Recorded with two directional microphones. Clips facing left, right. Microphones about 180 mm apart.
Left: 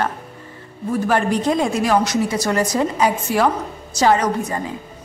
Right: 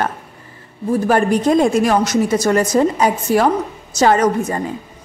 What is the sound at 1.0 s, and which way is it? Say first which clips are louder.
A woman's voice: right 3 dB; 45° right (ahead or behind).